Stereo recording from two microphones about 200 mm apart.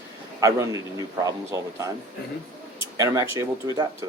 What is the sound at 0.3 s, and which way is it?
Speech, 15° right (ahead or behind).